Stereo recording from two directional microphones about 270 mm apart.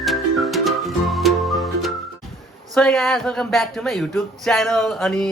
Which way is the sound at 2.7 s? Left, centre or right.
Centre.